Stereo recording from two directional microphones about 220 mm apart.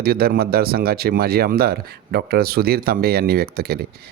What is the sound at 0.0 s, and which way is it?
Speech, 45° right (ahead or behind).